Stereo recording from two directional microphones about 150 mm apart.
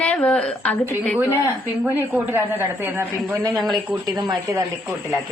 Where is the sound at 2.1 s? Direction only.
15° right (ahead or behind).